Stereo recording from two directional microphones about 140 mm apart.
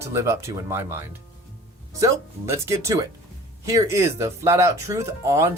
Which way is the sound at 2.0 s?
20° right (ahead or behind).